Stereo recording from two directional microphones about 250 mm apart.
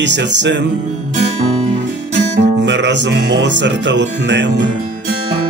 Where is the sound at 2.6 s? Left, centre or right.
Right.